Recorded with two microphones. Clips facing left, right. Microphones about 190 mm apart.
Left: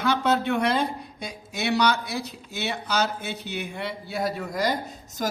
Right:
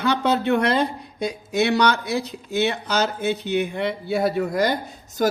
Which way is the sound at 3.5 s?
55° right (ahead or behind).